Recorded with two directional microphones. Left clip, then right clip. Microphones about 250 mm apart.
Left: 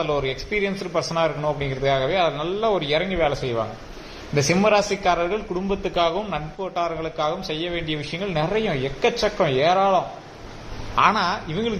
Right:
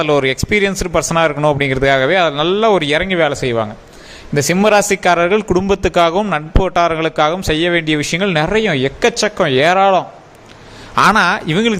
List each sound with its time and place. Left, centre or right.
0.0 s speech: right